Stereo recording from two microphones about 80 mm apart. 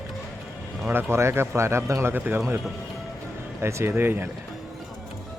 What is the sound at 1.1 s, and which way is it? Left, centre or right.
A man's voice, right.